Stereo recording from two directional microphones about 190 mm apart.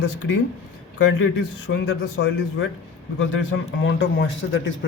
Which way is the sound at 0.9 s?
70° left (ahead or behind).